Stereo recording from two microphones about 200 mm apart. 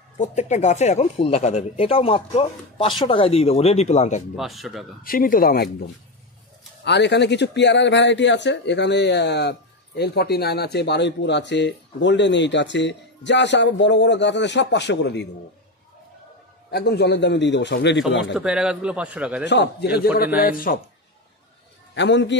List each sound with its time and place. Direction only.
0.2 s speech: 35° left (ahead or behind)
4.4 s speech: centre (ahead or behind)
5.0 s speech: 45° left (ahead or behind)
16.7 s speech: 55° left (ahead or behind)
18.3 s speech: 5° right (ahead or behind)
19.4 s speech: 60° left (ahead or behind)
21.9 s speech: 60° left (ahead or behind)